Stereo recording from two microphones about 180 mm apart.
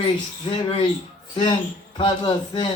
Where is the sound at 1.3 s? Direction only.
25° left (ahead or behind).